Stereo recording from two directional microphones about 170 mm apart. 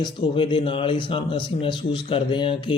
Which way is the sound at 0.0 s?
30° left (ahead or behind).